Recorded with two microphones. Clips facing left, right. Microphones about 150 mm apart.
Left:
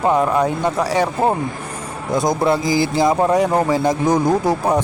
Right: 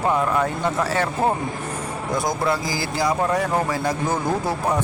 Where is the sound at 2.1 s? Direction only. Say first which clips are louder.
Left 6 dB; 25° left (ahead or behind).